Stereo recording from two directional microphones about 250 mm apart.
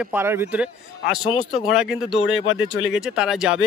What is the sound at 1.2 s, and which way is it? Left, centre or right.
Speech, centre.